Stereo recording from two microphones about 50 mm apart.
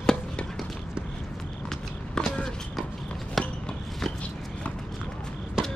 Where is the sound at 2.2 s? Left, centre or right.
Centre.